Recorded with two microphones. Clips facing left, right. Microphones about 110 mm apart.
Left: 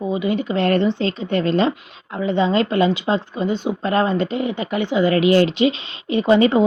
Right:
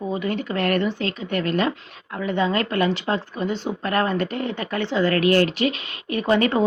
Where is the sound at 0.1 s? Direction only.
15° left (ahead or behind).